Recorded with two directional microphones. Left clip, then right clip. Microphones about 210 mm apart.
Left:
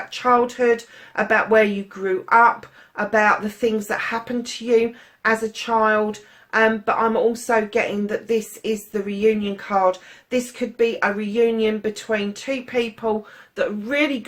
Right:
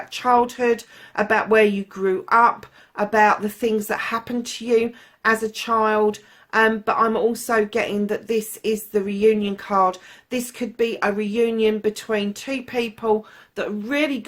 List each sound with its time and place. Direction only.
0.1 s speech: 45° right (ahead or behind)